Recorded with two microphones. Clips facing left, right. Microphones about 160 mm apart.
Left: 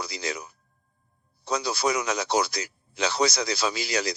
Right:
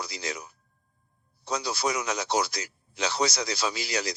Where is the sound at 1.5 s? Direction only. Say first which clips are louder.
Left 3 dB; 90° left.